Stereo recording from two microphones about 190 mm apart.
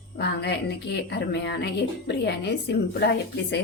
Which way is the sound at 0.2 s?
60° left (ahead or behind).